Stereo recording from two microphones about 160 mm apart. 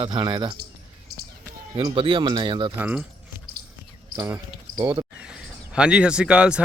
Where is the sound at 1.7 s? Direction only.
30° right (ahead or behind).